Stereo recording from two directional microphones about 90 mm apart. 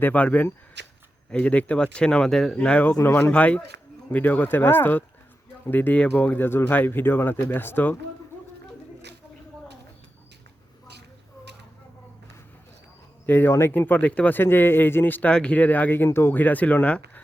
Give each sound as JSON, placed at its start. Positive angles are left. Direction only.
{"t": 0.0, "sound": "speech", "side_deg": 15}
{"t": 2.9, "sound": "speech", "side_deg": 30}
{"t": 13.2, "sound": "speech", "side_deg": 20}